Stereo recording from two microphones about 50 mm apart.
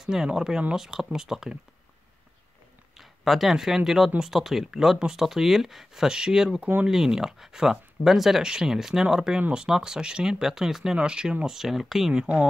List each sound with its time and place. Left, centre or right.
0.0 s speech: centre
3.0 s speech: centre
12.2 s speech: centre